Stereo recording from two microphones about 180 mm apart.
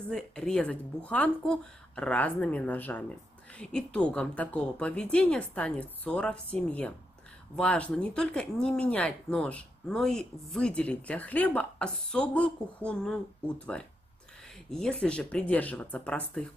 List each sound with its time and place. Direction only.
0.1 s a woman's voice: 5° left (ahead or behind)